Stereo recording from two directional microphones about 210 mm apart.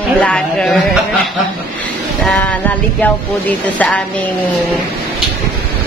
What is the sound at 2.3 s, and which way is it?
Speech, 5° left (ahead or behind).